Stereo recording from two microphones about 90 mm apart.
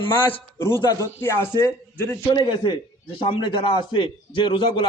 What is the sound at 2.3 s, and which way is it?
A man's voice, 60° left (ahead or behind).